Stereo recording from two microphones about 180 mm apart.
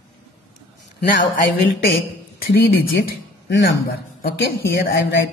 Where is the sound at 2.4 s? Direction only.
55° left (ahead or behind).